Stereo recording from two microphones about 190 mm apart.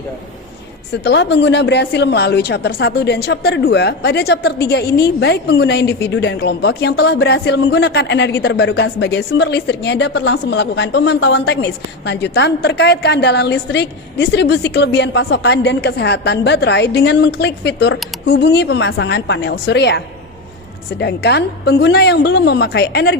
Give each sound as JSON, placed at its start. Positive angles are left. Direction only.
{"t": 1.0, "sound": "speech", "side_deg": 70}
{"t": 21.0, "sound": "speech", "side_deg": 60}